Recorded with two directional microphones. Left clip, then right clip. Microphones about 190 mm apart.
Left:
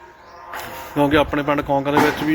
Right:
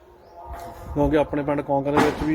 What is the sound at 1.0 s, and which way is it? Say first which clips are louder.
Speech: left 4 dB; 5° right (ahead or behind).